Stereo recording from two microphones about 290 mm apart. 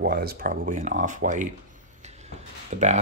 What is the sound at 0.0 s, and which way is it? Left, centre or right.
Speech, right.